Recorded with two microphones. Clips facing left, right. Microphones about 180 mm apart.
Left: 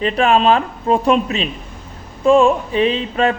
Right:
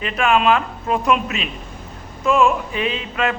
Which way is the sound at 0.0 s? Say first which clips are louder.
Left 3 dB; 35° left (ahead or behind).